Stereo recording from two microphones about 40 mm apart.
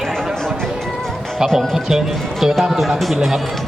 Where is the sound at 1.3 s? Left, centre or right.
Centre.